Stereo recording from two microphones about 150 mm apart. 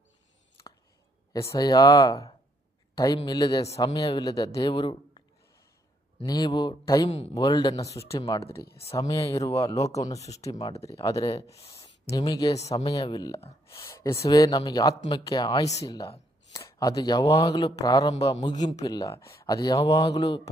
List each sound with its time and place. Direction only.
1.3 s speech: 20° left (ahead or behind)
6.2 s speech: 25° left (ahead or behind)
13.8 s speech: 20° left (ahead or behind)